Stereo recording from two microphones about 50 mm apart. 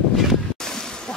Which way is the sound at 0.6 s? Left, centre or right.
Centre.